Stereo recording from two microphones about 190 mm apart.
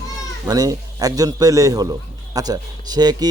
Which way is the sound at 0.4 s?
20° right (ahead or behind).